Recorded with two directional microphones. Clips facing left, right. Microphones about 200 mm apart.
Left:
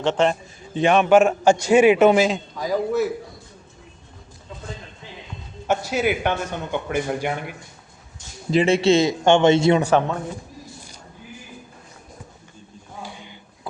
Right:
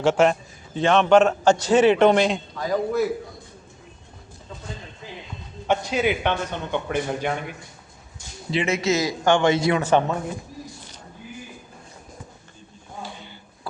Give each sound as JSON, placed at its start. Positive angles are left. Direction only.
{"t": 0.0, "sound": "a man's voice", "side_deg": -5}
{"t": 0.7, "sound": "a man's voice", "side_deg": 15}
{"t": 5.6, "sound": "a man's voice", "side_deg": 5}
{"t": 8.6, "sound": "a man's voice", "side_deg": 30}
{"t": 9.8, "sound": "speech", "side_deg": 0}
{"t": 13.0, "sound": "a sound", "side_deg": 10}